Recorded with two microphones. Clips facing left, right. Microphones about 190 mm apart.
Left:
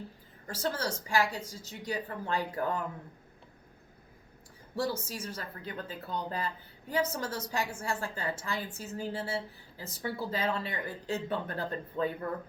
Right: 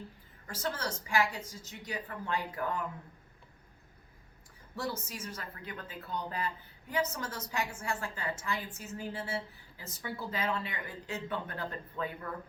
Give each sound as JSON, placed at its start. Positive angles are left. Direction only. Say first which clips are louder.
{"t": 0.4, "sound": "a woman's voice", "louder": "left 3 dB", "side_deg": 35}
{"t": 4.7, "sound": "a woman's voice", "louder": "left 5 dB", "side_deg": 35}